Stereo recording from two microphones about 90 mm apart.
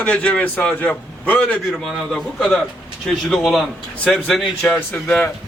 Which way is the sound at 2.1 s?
Centre (ahead or behind).